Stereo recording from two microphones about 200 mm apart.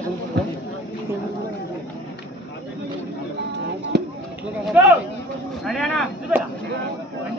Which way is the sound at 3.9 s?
60° right (ahead or behind).